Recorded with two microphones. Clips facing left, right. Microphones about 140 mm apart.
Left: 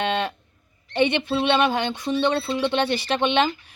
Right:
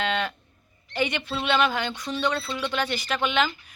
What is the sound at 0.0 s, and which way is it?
Livestock, 25° left (ahead or behind).